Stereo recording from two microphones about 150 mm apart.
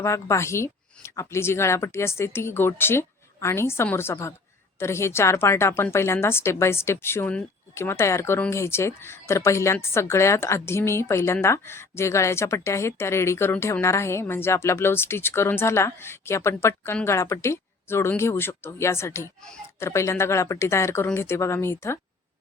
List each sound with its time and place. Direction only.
0.0 s a woman's voice: 20° left (ahead or behind)